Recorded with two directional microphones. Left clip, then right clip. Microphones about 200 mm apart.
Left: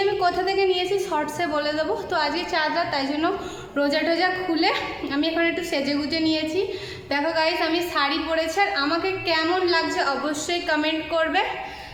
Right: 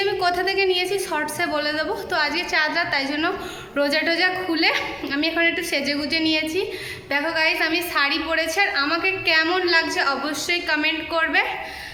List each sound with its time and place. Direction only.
0.0 s a woman's voice: 5° right (ahead or behind)
7.1 s a woman's voice: 15° right (ahead or behind)
7.4 s a woman's voice: centre (ahead or behind)